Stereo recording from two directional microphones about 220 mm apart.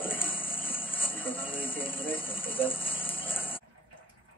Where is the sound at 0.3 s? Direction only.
25° left (ahead or behind).